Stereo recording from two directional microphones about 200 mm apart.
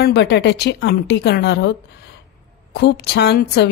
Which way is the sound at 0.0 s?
55° left (ahead or behind).